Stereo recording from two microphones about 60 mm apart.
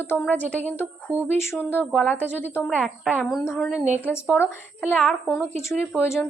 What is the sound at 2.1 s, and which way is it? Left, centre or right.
Speech, left.